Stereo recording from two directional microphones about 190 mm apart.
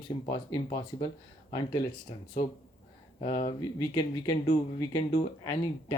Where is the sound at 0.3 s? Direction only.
25° left (ahead or behind).